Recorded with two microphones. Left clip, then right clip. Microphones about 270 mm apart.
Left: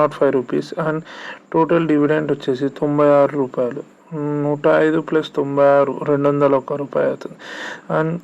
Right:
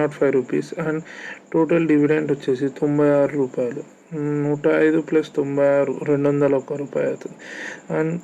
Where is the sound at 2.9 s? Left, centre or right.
Left.